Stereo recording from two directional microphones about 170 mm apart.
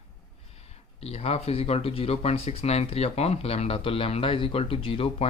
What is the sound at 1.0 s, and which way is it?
Speech, 35° left (ahead or behind).